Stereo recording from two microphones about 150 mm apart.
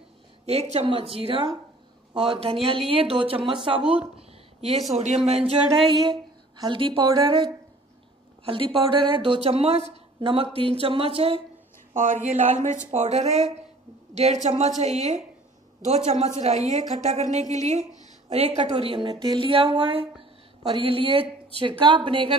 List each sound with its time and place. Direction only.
0.7 s speech: 40° right (ahead or behind)
4.2 s a sound: 45° right (ahead or behind)
4.9 s speech: 45° right (ahead or behind)
5.9 s speech: 30° right (ahead or behind)
8.5 s speech: 35° right (ahead or behind)
11.9 s speech: 60° right (ahead or behind); by 22.3 s 35° right (ahead or behind)